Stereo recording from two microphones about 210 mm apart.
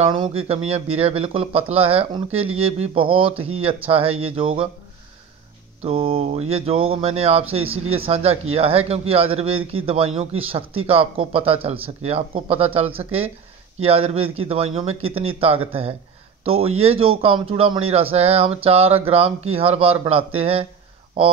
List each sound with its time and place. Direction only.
0.0 s a man's voice: 25° right (ahead or behind)
5.8 s a man's voice: 25° right (ahead or behind)